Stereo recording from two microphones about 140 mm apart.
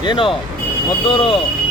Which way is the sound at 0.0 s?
35° left (ahead or behind).